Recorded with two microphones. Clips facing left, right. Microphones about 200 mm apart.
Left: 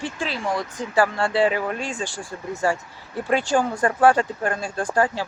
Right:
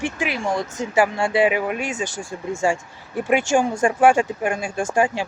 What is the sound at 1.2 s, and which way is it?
Speech, 10° right (ahead or behind).